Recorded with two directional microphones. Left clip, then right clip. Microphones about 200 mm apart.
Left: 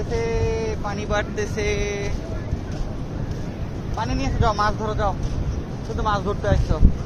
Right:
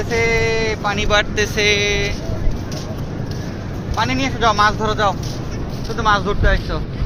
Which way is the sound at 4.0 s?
20° right (ahead or behind).